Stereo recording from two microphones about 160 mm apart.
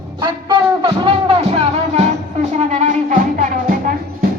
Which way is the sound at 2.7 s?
50° right (ahead or behind).